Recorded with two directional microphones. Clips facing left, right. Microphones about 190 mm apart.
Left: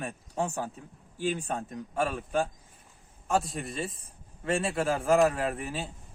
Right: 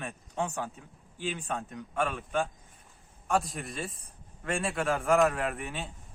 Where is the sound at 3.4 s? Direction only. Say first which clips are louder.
Left 3 dB; centre (ahead or behind).